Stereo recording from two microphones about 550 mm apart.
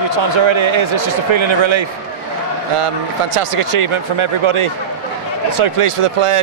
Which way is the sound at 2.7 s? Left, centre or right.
Right.